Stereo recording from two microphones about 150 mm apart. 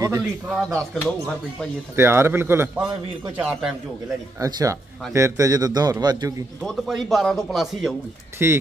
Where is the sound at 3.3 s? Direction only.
5° right (ahead or behind).